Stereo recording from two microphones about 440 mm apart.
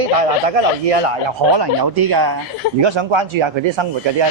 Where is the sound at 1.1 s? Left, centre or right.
Right.